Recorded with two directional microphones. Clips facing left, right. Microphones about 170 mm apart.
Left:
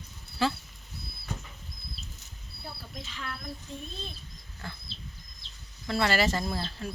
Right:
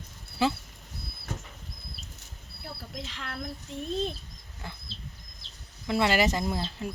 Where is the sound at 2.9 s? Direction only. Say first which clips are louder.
Even; 80° right.